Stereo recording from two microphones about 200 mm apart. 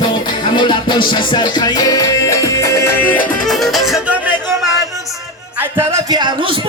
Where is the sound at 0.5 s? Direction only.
25° left (ahead or behind); by 3.8 s 5° left (ahead or behind).